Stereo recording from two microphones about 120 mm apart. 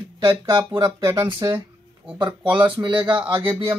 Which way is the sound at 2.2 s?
40° right (ahead or behind).